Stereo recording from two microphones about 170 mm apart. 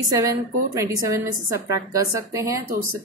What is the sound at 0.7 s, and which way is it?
Speech, 20° right (ahead or behind).